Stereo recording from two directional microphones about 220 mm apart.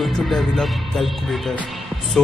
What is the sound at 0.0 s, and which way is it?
Music, centre (ahead or behind).